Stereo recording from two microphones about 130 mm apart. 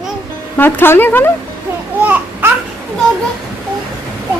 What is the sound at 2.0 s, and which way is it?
Babbling, 10° right (ahead or behind).